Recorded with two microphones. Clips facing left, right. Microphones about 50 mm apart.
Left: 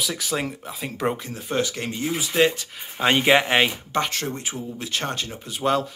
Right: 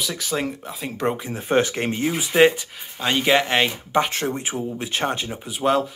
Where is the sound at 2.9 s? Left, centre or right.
Left.